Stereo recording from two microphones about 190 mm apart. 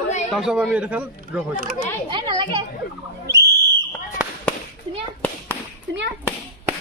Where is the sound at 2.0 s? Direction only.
25° right (ahead or behind).